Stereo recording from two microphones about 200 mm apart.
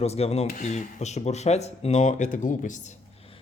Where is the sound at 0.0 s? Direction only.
30° left (ahead or behind).